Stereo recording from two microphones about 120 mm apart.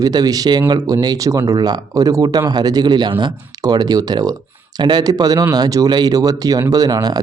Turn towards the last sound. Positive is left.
turn(degrees=-35)  # may be behind; listen again after turning